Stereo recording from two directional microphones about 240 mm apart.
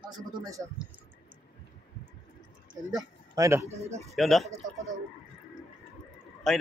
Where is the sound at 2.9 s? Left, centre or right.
Centre.